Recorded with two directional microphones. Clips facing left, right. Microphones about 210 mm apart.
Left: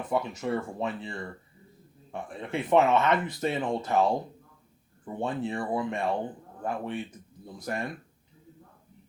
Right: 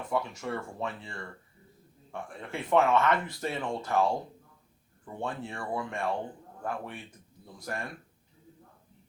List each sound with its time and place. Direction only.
0.0 s speech: 20° left (ahead or behind)